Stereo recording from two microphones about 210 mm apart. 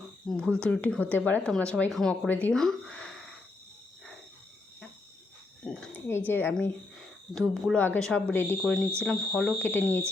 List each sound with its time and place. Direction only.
0.3 s speech: 5° left (ahead or behind)
5.6 s speech: 5° left (ahead or behind)